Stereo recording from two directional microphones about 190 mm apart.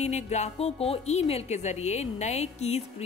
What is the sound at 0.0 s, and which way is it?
Speech, 35° left (ahead or behind).